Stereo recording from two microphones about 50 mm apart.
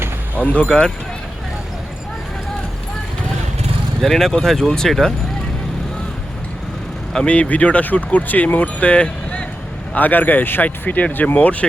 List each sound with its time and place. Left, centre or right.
0.3 s speech: left
0.7 s speech: centre
4.0 s speech: centre
7.3 s speech: left
9.9 s speech: left